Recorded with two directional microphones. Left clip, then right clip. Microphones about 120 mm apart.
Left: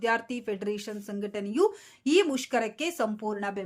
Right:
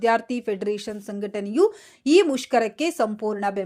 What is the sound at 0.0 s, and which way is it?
Speech, 40° right (ahead or behind).